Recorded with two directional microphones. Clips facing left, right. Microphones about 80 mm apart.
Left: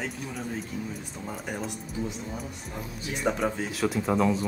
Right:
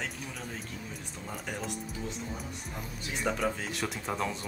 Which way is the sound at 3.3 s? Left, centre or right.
Left.